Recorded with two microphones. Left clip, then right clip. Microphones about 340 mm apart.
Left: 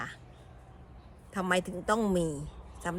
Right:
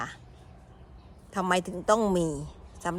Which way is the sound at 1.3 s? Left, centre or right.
Centre.